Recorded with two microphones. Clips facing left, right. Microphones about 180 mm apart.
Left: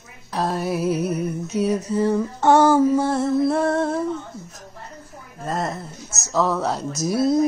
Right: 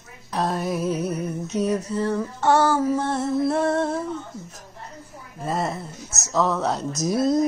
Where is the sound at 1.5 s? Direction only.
10° left (ahead or behind).